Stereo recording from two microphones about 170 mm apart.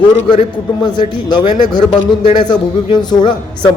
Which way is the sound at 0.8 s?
25° left (ahead or behind).